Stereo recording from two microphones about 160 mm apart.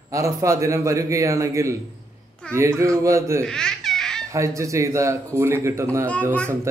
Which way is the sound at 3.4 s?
5° left (ahead or behind).